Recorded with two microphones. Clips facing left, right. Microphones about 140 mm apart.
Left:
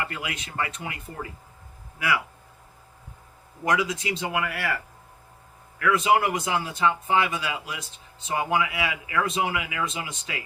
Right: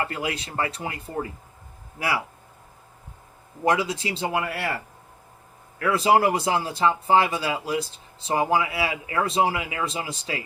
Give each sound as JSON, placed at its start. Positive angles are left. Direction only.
{"t": 0.0, "sound": "speech", "side_deg": -35}
{"t": 3.6, "sound": "speech", "side_deg": -30}
{"t": 5.8, "sound": "speech", "side_deg": -35}